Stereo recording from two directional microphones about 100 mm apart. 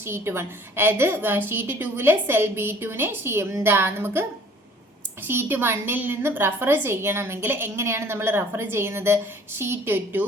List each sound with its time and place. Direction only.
0.0 s a woman's voice: 25° right (ahead or behind)